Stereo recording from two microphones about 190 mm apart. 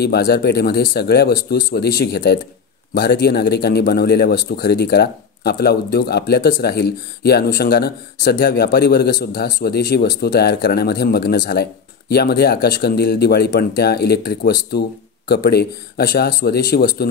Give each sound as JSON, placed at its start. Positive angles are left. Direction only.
{"t": 0.0, "sound": "a man's voice", "side_deg": 60}